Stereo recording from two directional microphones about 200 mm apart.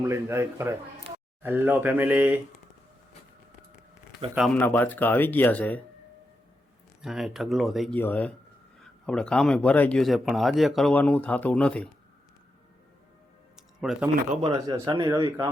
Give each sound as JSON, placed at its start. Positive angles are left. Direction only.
{"t": 0.0, "sound": "speech", "side_deg": -15}
{"t": 4.4, "sound": "speech", "side_deg": 5}
{"t": 7.0, "sound": "speech", "side_deg": 0}
{"t": 13.7, "sound": "speech", "side_deg": -5}
{"t": 14.7, "sound": "speech", "side_deg": -20}